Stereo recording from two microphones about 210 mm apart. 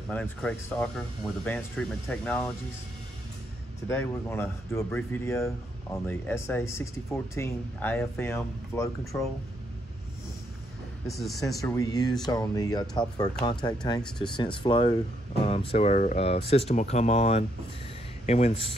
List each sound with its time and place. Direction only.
0.1 s speech: 5° left (ahead or behind)
3.9 s speech: 10° left (ahead or behind)
11.1 s speech: centre (ahead or behind)
11.4 s speech: 15° left (ahead or behind)
14.0 s speech: 5° left (ahead or behind)
14.3 s speech: 20° left (ahead or behind)